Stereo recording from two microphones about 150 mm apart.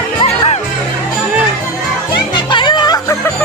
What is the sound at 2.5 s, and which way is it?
Music, 30° left (ahead or behind).